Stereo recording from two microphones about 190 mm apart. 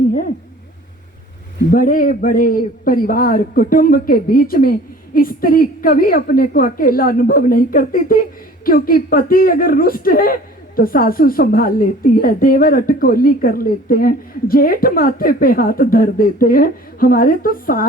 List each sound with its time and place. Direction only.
1.7 s a woman's voice: 45° left (ahead or behind)